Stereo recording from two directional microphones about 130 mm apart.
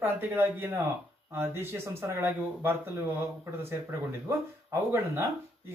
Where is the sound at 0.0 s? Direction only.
15° right (ahead or behind).